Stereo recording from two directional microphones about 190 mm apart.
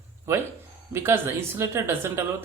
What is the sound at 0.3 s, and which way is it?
Speech, 15° right (ahead or behind).